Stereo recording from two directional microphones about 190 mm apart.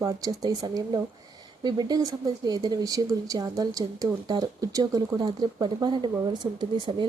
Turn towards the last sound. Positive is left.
turn(degrees=-25)  # may be behind; listen again after turning